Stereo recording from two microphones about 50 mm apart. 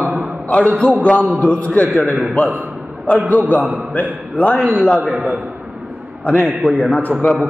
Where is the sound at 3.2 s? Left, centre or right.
Left.